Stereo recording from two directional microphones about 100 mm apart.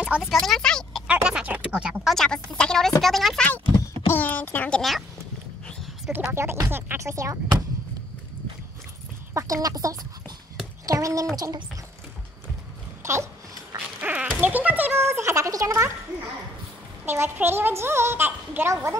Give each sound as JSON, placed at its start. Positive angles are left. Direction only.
{"t": 0.0, "sound": "speech", "side_deg": -15}
{"t": 0.3, "sound": "speech", "side_deg": 5}
{"t": 1.0, "sound": "speech", "side_deg": -10}
{"t": 2.1, "sound": "speech", "side_deg": 5}
{"t": 4.1, "sound": "a sound", "side_deg": 15}
{"t": 6.3, "sound": "a child's voice", "side_deg": -25}
{"t": 9.3, "sound": "a child's voice", "side_deg": -35}
{"t": 13.0, "sound": "a sound", "side_deg": -30}
{"t": 14.0, "sound": "a sound", "side_deg": -15}
{"t": 17.0, "sound": "a child's voice", "side_deg": -20}